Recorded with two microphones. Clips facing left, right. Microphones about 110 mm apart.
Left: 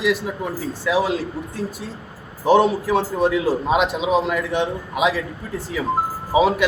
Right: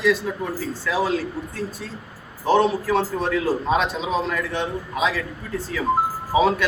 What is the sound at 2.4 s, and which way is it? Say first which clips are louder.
Speech: left 3 dB; 15° left (ahead or behind).